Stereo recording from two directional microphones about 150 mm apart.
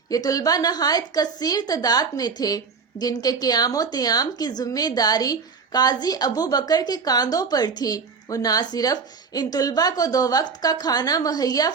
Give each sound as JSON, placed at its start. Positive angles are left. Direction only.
{"t": 0.1, "sound": "speech", "side_deg": 25}